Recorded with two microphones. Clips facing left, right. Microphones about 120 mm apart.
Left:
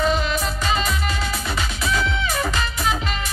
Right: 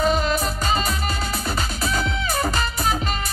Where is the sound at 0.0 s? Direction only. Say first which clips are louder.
Right 1 dB; 40° right (ahead or behind).